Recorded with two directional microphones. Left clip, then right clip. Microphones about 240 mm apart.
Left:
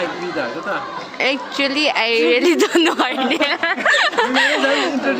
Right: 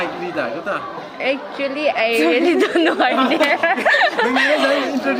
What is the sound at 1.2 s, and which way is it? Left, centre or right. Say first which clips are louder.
A woman's voice: left 2 dB; left.